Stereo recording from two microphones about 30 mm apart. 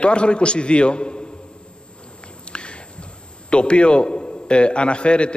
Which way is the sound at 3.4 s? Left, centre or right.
Left.